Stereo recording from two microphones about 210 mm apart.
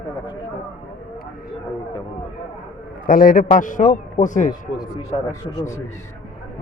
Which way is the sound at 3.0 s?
40° left (ahead or behind).